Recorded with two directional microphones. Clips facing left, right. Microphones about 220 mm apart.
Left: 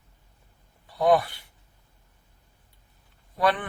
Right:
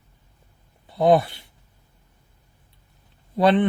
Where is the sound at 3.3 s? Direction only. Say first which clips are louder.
Right 7 dB; 25° right (ahead or behind).